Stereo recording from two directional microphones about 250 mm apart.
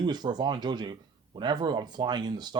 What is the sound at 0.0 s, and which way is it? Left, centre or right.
Speech, centre.